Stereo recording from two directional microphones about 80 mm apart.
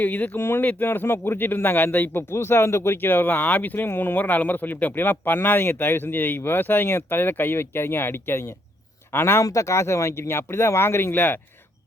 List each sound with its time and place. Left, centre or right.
0.0 s speech: left
9.4 s speech: left